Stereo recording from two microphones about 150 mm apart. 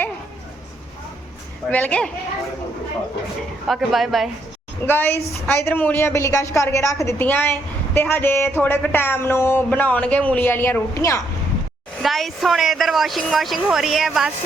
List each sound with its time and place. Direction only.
1.7 s speech: 10° left (ahead or behind)
3.7 s a woman's voice: centre (ahead or behind)
4.9 s speech: 15° left (ahead or behind)
12.0 s a woman's voice: centre (ahead or behind)